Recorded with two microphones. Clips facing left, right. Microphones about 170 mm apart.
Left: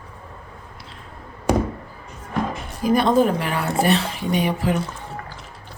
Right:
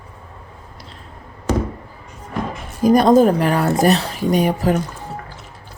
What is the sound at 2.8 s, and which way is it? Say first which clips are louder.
A woman's voice: right 5 dB; 40° right (ahead or behind).